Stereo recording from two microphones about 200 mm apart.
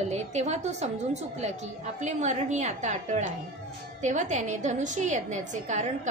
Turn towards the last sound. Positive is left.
turn(degrees=-35)  # may be behind; listen again after turning